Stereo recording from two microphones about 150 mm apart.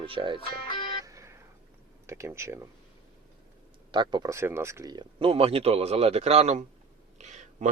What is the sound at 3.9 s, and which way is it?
Speech, 30° right (ahead or behind).